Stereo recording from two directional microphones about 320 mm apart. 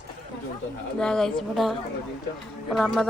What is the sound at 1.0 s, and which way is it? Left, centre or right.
A woman's voice, centre.